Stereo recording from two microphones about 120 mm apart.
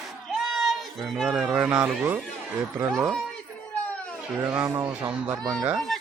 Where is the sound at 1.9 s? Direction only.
10° right (ahead or behind).